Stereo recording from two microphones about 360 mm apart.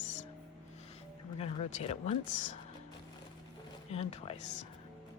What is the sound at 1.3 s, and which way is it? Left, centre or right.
Speech, centre.